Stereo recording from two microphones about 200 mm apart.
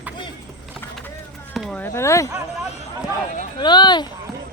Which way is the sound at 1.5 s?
5° left (ahead or behind).